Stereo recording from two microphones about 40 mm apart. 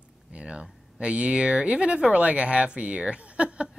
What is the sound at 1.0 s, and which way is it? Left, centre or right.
Speech, right.